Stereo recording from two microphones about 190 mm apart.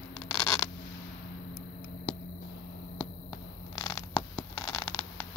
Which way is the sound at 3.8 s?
20° left (ahead or behind).